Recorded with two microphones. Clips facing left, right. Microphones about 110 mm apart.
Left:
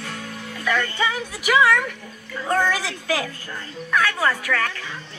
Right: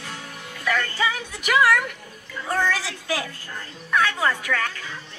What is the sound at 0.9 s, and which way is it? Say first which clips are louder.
Speech: left 1 dB; centre (ahead or behind).